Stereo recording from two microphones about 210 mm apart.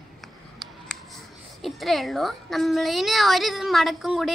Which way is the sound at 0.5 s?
Centre (ahead or behind).